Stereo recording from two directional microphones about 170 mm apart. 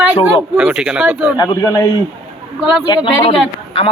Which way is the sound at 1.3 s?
20° left (ahead or behind).